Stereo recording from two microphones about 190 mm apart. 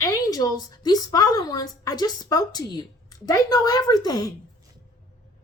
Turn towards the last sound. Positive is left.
turn(degrees=20)  # may be behind; listen again after turning